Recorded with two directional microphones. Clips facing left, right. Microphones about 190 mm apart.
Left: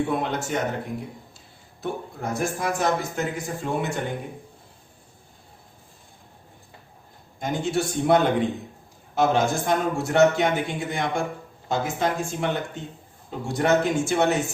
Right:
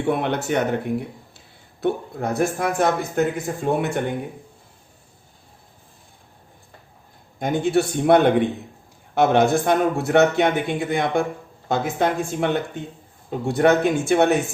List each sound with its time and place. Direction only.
0.1 s a man's voice: 65° right (ahead or behind)
7.3 s a man's voice: 60° right (ahead or behind)